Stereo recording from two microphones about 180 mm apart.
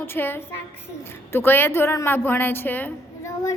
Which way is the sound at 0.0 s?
10° left (ahead or behind).